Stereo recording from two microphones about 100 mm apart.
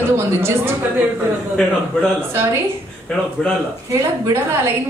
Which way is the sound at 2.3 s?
30° right (ahead or behind).